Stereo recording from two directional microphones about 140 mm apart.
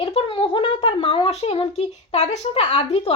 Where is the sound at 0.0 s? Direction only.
40° left (ahead or behind).